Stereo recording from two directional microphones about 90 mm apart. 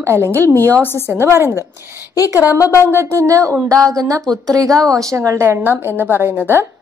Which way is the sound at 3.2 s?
35° right (ahead or behind).